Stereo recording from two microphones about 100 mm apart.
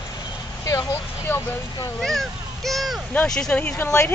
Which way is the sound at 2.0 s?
5° left (ahead or behind).